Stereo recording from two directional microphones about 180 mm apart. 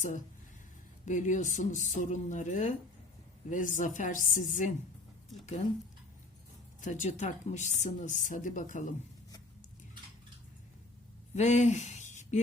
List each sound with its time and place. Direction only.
1.0 s a woman's voice: 45° left (ahead or behind)
6.8 s a woman's voice: 45° left (ahead or behind)
11.3 s speech: 40° left (ahead or behind)